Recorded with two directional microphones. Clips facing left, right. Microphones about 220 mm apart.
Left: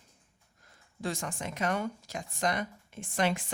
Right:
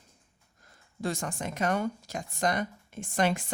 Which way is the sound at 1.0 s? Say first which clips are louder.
Right 3 dB; 45° right (ahead or behind).